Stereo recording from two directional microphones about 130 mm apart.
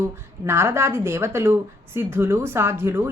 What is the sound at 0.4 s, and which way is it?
A woman's voice, 20° right (ahead or behind).